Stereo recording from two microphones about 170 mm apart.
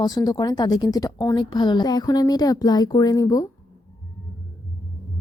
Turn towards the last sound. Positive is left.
turn(degrees=20)  # may be behind; listen again after turning